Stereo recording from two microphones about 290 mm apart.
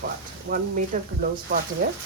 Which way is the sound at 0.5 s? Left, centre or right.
Right.